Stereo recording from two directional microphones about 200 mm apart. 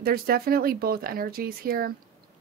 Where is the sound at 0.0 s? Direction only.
50° right (ahead or behind).